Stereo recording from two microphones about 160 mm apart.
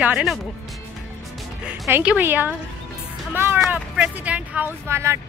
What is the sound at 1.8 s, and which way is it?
Speech, 10° right (ahead or behind).